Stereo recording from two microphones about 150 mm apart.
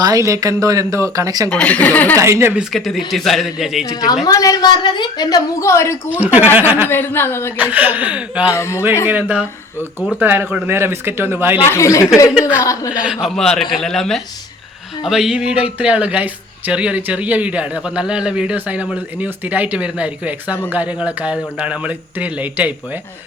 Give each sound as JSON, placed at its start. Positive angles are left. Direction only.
{"t": 0.0, "sound": "speech", "side_deg": -20}
{"t": 1.5, "sound": "speech", "side_deg": 10}
{"t": 2.1, "sound": "speech", "side_deg": -20}
{"t": 2.6, "sound": "a man's voice", "side_deg": 0}
{"t": 3.8, "sound": "a woman's voice", "side_deg": 25}
{"t": 6.1, "sound": "speech", "side_deg": -10}
{"t": 6.9, "sound": "speech", "side_deg": 15}
{"t": 7.5, "sound": "speech", "side_deg": -10}
{"t": 8.5, "sound": "a woman's voice", "side_deg": 20}
{"t": 9.0, "sound": "speech", "side_deg": -10}
{"t": 11.6, "sound": "a woman's voice", "side_deg": 20}
{"t": 12.9, "sound": "speech", "side_deg": -5}
{"t": 13.2, "sound": "a man's voice", "side_deg": 5}